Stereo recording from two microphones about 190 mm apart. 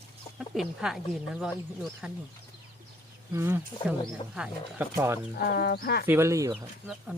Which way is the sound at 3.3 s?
10° right (ahead or behind).